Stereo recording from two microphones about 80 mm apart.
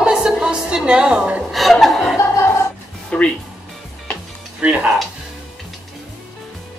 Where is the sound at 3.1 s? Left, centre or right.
Centre.